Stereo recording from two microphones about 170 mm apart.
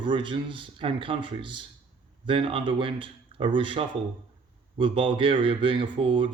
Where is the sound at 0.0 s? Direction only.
30° right (ahead or behind).